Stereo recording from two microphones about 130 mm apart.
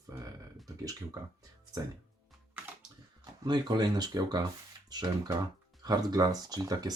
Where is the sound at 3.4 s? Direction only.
35° right (ahead or behind).